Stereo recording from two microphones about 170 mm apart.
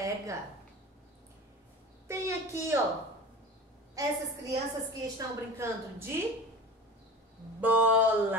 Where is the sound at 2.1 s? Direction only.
15° right (ahead or behind).